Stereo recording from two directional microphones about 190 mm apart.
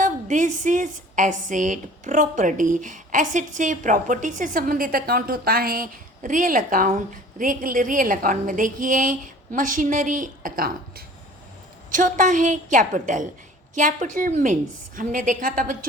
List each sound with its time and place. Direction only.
0.0 s a woman's voice: 40° right (ahead or behind)